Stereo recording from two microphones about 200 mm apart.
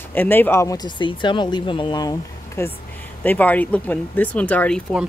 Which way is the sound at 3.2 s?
10° left (ahead or behind).